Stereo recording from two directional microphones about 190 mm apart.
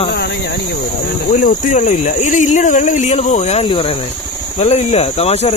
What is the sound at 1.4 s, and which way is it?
Speech, 40° left (ahead or behind).